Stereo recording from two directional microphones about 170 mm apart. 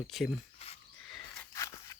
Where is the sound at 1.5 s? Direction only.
20° left (ahead or behind).